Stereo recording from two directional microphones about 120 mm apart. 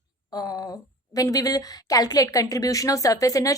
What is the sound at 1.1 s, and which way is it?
A woman's voice, 30° left (ahead or behind).